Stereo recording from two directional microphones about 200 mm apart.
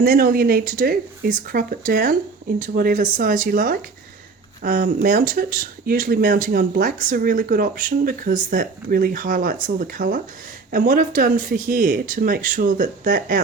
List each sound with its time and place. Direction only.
0.0 s speech: 45° right (ahead or behind)